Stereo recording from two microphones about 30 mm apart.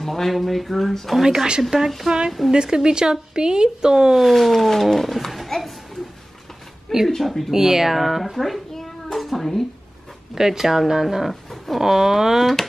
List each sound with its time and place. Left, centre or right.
0.0 s a child's voice: centre
1.2 s speech: centre
1.7 s a child's voice: centre
2.0 s speech: right
4.2 s a child's voice: centre
6.9 s a child's voice: centre
7.5 s a child's voice: centre
9.4 s speech: centre
10.3 s speech: centre
11.2 s speech: centre
11.8 s speech: centre